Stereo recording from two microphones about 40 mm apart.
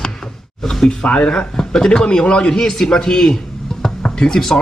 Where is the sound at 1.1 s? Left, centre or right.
Left.